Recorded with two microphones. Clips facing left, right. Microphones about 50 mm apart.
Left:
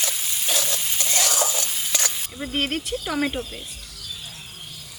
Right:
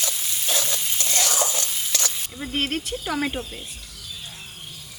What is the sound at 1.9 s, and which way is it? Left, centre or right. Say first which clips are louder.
Sizzle: left 2 dB; centre.